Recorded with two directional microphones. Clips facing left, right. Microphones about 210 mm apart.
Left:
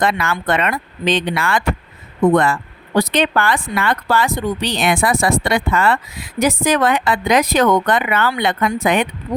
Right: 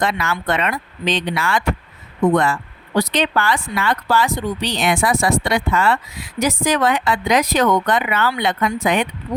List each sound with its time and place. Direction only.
0.0 s speech: 55° left (ahead or behind)